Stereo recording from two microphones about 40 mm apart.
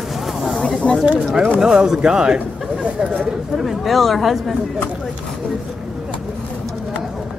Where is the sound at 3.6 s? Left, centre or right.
Centre.